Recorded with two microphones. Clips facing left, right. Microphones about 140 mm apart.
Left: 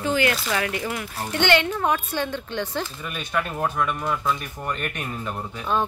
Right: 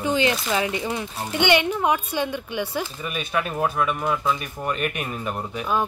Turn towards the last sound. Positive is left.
turn(degrees=-10)  # may be behind; listen again after turning